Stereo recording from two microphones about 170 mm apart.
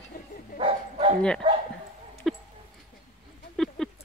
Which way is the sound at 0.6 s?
35° right (ahead or behind).